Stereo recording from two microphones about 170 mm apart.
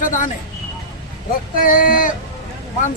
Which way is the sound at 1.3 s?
55° left (ahead or behind).